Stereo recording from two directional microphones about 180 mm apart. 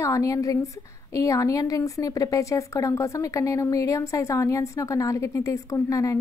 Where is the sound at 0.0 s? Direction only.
20° left (ahead or behind).